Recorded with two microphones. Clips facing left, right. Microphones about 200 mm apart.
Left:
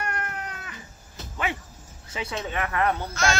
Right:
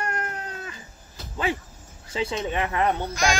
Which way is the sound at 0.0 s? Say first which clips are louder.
Right 2 dB; 30° right (ahead or behind).